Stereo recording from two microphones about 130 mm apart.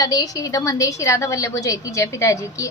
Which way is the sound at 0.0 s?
30° left (ahead or behind).